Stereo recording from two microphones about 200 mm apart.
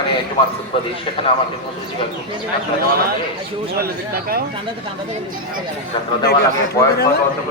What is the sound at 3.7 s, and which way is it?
Speech, 50° right (ahead or behind).